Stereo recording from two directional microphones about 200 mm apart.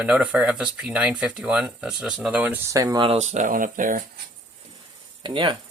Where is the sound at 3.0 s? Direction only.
30° right (ahead or behind).